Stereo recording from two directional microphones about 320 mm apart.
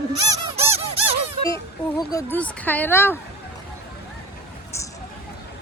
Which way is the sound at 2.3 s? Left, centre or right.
Centre.